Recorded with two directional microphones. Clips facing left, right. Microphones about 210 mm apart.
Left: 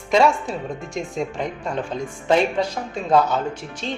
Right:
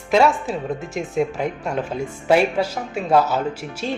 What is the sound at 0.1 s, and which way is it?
Speech, 5° right (ahead or behind).